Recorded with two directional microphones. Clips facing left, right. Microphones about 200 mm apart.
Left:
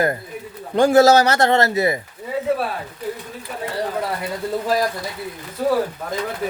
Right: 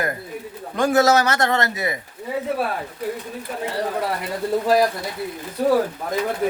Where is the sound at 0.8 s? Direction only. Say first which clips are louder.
Left 4 dB; 30° left (ahead or behind).